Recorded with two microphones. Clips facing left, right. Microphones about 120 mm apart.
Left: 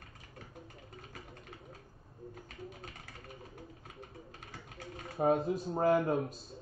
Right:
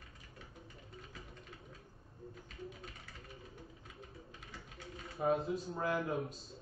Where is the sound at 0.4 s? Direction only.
55° left (ahead or behind).